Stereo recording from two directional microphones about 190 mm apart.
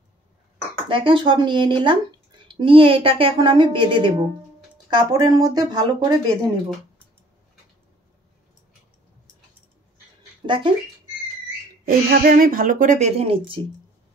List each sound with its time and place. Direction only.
0.8 s speech: 25° right (ahead or behind)
10.4 s speech: 25° right (ahead or behind)
11.8 s a woman's voice: 50° right (ahead or behind); by 13.6 s 30° right (ahead or behind)